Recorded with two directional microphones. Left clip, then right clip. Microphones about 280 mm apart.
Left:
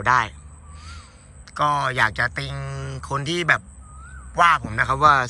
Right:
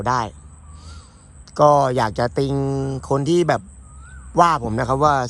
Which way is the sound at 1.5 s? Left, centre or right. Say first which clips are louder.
Right 7 dB; centre.